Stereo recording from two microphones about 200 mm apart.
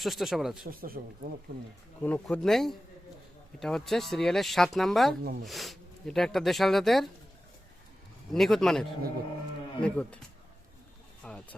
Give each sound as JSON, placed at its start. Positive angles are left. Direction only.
{"t": 0.0, "sound": "speech", "side_deg": 0}
{"t": 0.7, "sound": "speech", "side_deg": -45}
{"t": 2.0, "sound": "speech", "side_deg": 10}
{"t": 5.2, "sound": "speech", "side_deg": -45}
{"t": 5.5, "sound": "speech", "side_deg": 0}
{"t": 8.3, "sound": "speech", "side_deg": 0}
{"t": 11.2, "sound": "a sound", "side_deg": 5}